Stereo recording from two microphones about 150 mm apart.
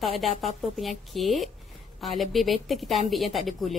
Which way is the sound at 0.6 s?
Centre (ahead or behind).